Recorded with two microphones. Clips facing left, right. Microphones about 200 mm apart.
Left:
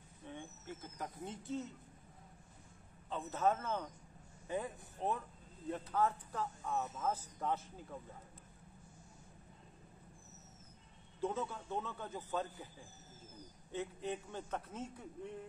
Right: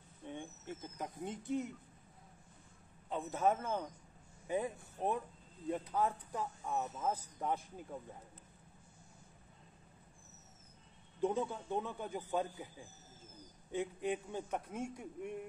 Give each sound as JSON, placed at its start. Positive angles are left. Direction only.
{"t": 0.3, "sound": "speech", "side_deg": -20}
{"t": 3.1, "sound": "speech", "side_deg": -15}
{"t": 11.1, "sound": "speech", "side_deg": -15}
{"t": 13.7, "sound": "speech", "side_deg": -15}